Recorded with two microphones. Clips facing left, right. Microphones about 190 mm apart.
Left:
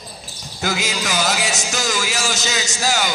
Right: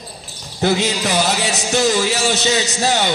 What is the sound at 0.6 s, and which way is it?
A man's voice, 30° right (ahead or behind).